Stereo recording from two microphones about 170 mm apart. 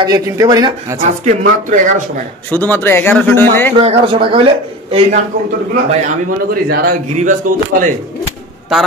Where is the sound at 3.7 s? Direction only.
35° right (ahead or behind).